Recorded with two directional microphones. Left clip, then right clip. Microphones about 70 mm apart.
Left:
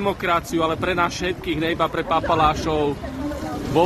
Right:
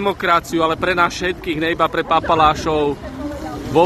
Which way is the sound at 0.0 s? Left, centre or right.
Right.